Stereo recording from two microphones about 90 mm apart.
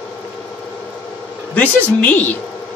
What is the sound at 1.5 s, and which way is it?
Speech, 15° left (ahead or behind).